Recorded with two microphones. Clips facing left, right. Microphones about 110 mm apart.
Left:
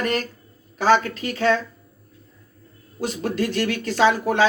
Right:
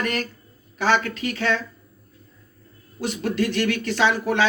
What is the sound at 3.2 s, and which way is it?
Speech, 40° left (ahead or behind).